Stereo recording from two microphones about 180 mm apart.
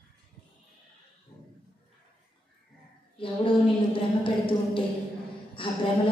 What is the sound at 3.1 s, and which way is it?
A woman's voice, 30° left (ahead or behind).